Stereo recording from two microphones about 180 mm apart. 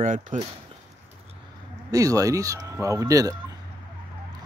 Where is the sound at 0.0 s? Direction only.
45° right (ahead or behind).